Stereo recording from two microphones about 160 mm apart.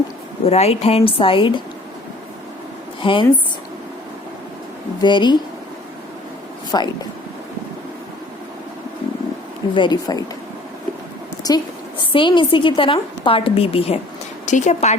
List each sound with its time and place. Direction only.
0.4 s a woman's voice: 40° left (ahead or behind)
3.0 s a woman's voice: 30° left (ahead or behind)
4.9 s speech: 30° left (ahead or behind)
6.7 s speech: 25° left (ahead or behind)
9.7 s speech: 30° left (ahead or behind)
11.4 s a woman's voice: 30° left (ahead or behind); by 14.9 s 45° left (ahead or behind)